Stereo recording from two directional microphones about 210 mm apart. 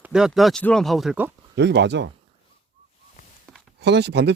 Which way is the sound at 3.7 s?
55° right (ahead or behind).